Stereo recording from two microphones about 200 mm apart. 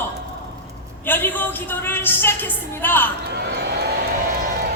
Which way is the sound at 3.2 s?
55° right (ahead or behind).